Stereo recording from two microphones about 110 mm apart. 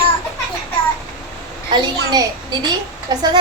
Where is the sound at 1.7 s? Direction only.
40° right (ahead or behind).